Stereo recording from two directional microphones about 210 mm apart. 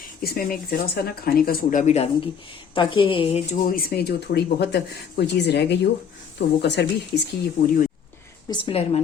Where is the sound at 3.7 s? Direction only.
45° left (ahead or behind).